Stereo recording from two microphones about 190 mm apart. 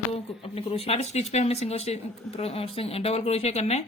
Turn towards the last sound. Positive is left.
turn(degrees=35)  # may be behind; listen again after turning